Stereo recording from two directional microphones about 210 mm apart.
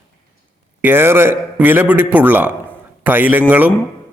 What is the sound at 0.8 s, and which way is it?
A man's voice, 10° right (ahead or behind).